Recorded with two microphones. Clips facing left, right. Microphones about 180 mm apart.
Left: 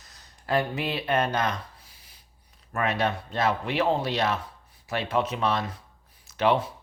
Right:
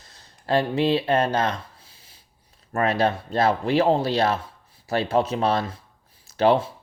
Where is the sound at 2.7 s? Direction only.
30° right (ahead or behind).